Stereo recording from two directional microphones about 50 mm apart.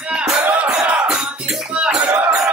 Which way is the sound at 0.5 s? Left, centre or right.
Right.